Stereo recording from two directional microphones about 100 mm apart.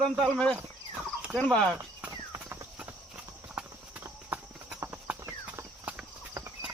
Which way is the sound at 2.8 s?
15° right (ahead or behind).